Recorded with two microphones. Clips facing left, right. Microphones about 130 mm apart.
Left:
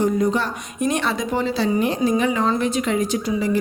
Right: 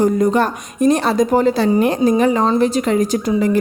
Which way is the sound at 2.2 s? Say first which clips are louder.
Right 6 dB; 40° right (ahead or behind).